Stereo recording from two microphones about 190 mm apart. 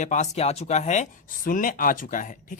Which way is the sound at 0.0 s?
40° left (ahead or behind).